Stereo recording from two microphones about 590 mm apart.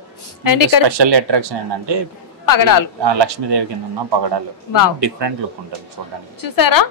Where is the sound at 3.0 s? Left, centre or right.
Right.